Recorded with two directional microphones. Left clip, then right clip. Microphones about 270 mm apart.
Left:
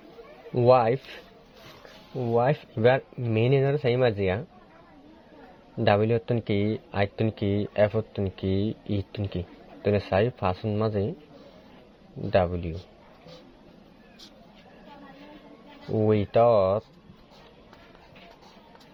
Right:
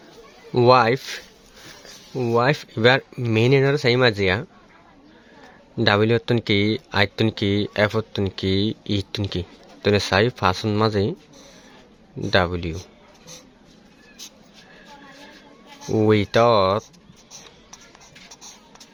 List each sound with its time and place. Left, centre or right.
0.5 s speech: centre
2.3 s speech: right
5.7 s speech: centre
12.3 s speech: right
16.0 s speech: centre